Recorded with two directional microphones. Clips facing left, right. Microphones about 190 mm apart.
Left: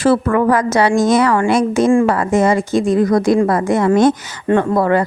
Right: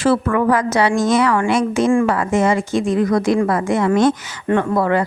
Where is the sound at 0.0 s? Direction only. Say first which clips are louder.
Left 3 dB; 40° left (ahead or behind).